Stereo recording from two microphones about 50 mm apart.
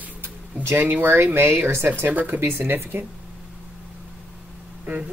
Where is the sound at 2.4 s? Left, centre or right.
Right.